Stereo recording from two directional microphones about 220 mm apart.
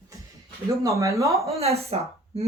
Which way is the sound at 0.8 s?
15° right (ahead or behind).